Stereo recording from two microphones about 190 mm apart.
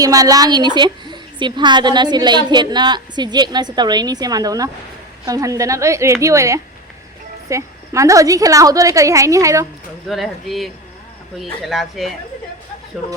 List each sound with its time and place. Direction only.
0.0 s a woman's voice: 20° right (ahead or behind)
10.1 s speech: centre (ahead or behind)